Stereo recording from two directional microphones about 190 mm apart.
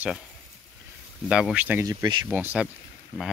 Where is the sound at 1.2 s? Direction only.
5° right (ahead or behind).